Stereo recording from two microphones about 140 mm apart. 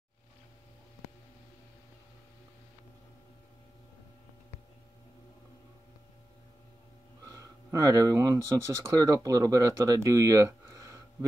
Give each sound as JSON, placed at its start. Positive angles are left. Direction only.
{"t": 7.2, "sound": "speech", "side_deg": -25}